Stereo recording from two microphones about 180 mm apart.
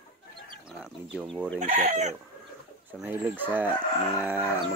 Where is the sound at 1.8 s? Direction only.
40° right (ahead or behind).